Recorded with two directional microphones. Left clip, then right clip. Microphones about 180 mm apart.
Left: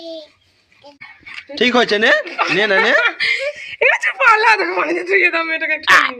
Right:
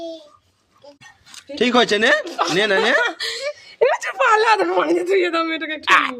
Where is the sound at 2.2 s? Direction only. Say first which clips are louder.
Left 3 dB; 55° right (ahead or behind).